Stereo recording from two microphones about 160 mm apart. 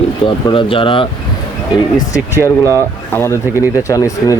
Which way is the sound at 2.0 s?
20° left (ahead or behind).